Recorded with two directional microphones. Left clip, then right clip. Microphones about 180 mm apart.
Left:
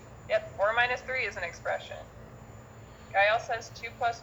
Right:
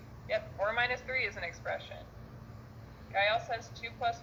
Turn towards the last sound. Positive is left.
turn(degrees=-15)  # may be behind; listen again after turning